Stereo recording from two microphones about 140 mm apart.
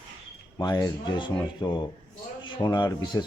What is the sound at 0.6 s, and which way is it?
Speech, 30° left (ahead or behind).